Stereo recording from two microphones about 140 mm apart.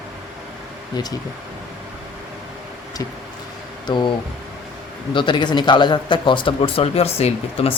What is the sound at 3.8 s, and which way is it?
Speech, 35° left (ahead or behind).